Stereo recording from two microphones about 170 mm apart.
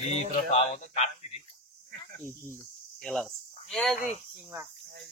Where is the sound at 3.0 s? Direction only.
Centre (ahead or behind).